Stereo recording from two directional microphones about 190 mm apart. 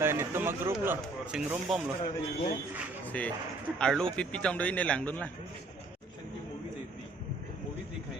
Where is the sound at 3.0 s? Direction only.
10° left (ahead or behind).